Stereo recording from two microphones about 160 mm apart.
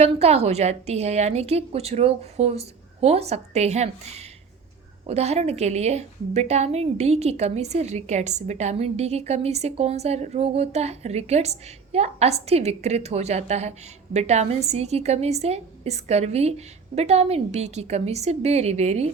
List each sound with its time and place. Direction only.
0.0 s a woman's voice: 40° right (ahead or behind)